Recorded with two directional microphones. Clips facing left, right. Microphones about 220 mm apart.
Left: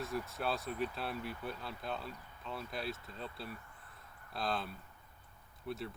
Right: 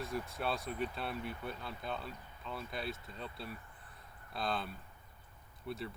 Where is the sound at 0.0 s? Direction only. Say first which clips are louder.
Even; centre (ahead or behind).